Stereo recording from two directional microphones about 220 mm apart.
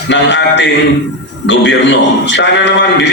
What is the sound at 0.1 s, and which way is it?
A man's voice, 55° left (ahead or behind).